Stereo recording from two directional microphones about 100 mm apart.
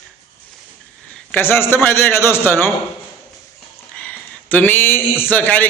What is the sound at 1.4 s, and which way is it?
A man's voice, 25° left (ahead or behind).